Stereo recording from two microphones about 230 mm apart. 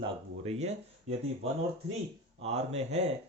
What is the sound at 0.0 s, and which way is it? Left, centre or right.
Speech, right.